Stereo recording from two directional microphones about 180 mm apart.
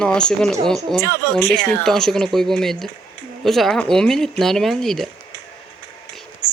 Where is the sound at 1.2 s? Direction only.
20° right (ahead or behind).